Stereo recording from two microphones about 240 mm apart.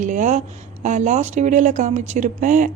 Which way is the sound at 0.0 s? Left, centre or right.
Right.